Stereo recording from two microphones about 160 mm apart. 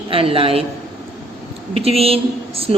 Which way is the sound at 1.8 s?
35° right (ahead or behind).